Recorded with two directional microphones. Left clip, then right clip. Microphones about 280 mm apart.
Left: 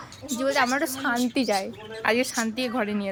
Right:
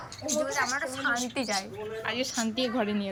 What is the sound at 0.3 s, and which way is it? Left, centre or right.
A woman's voice, left.